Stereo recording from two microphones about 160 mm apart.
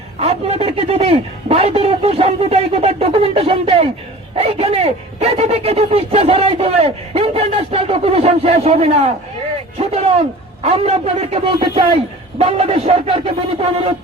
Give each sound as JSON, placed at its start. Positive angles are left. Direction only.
{"t": 0.2, "sound": "speech", "side_deg": -40}